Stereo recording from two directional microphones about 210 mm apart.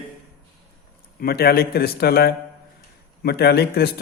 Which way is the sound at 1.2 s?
45° left (ahead or behind).